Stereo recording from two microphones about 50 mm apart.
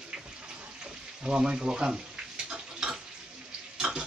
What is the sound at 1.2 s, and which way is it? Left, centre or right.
Speech, centre.